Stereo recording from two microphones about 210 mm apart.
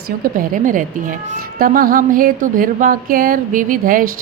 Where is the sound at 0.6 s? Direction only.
40° right (ahead or behind).